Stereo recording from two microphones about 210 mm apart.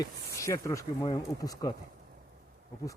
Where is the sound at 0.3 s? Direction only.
15° left (ahead or behind).